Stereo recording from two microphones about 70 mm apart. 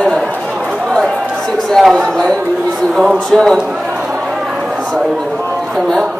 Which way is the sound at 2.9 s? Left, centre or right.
Centre.